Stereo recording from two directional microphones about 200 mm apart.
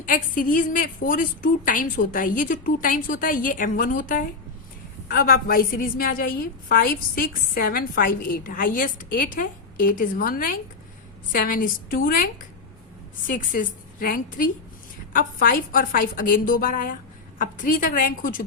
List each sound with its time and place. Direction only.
0.0 s a woman's voice: 45° left (ahead or behind)